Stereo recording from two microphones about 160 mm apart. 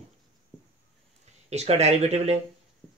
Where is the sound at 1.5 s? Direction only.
45° right (ahead or behind).